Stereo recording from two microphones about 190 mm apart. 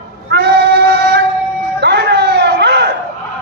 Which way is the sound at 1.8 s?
60° right (ahead or behind).